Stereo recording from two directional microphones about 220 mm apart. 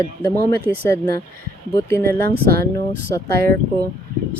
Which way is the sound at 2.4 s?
45° right (ahead or behind).